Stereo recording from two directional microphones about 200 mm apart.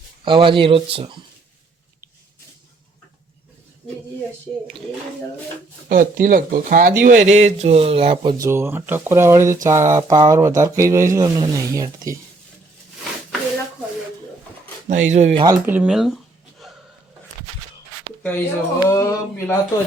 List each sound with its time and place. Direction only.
0.3 s speech: 25° right (ahead or behind)
5.9 s speech: 45° right (ahead or behind); by 8.4 s 25° right (ahead or behind)
8.4 s speech: 10° right (ahead or behind)
14.8 s speech: 35° right (ahead or behind)
15.4 s speech: 10° right (ahead or behind)
16.6 s a sound: centre (ahead or behind)
18.2 s speech: 10° left (ahead or behind)